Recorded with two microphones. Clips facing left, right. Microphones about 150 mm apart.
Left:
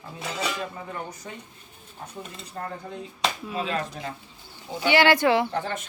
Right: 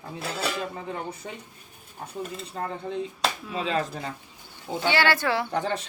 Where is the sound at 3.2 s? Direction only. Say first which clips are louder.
Even; centre (ahead or behind).